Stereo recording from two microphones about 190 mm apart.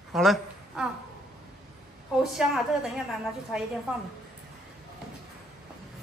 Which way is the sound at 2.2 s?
Centre (ahead or behind).